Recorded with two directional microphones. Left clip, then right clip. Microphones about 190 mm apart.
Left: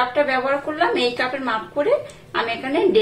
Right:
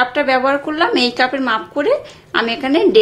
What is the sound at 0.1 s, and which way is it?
A woman's voice, 60° right (ahead or behind).